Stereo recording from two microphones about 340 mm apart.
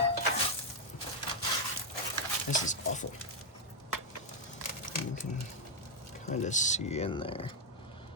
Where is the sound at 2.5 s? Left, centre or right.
Left.